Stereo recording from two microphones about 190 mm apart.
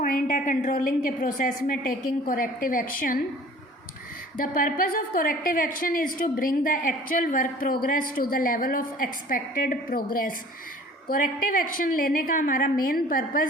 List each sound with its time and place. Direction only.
0.0 s a woman's voice: 45° left (ahead or behind)
4.4 s a woman's voice: 45° left (ahead or behind)